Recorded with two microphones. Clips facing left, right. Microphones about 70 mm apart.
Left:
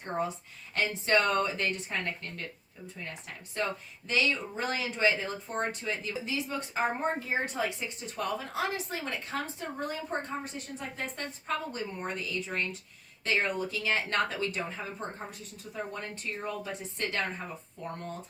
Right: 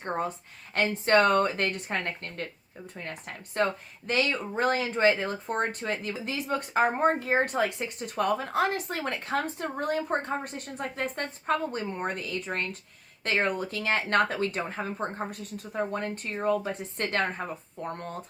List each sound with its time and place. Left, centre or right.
0.7 s speech: right